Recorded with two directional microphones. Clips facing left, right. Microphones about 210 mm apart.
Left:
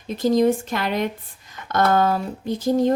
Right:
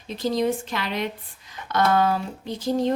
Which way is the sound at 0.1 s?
45° left (ahead or behind).